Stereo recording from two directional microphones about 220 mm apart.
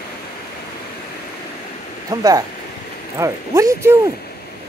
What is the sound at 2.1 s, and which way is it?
Speech, 15° right (ahead or behind).